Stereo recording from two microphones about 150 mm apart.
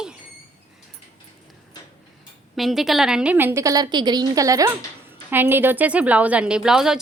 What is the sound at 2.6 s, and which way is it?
A woman's voice, centre (ahead or behind).